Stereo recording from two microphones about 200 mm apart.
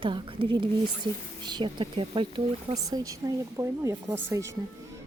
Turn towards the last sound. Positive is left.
turn(degrees=-15)  # may be behind; listen again after turning